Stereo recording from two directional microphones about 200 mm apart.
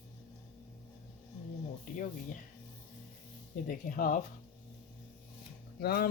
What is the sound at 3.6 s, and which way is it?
Speech, 45° left (ahead or behind).